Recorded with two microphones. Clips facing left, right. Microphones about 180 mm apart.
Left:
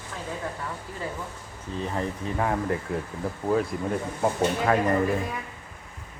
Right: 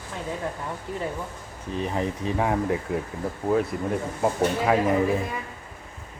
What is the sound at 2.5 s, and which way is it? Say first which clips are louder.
Speech: right 2 dB; 5° right (ahead or behind).